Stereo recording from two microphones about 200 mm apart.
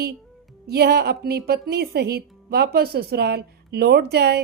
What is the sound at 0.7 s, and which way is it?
A woman's voice, 55° right (ahead or behind).